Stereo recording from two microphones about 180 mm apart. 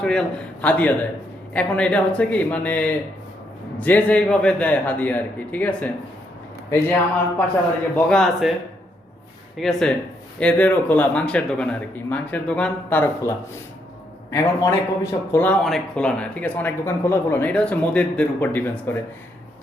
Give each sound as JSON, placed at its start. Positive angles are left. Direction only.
{"t": 0.0, "sound": "a man's voice", "side_deg": 5}
{"t": 9.6, "sound": "a man's voice", "side_deg": 0}